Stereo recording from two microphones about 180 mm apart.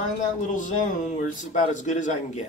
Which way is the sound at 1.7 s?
45° left (ahead or behind).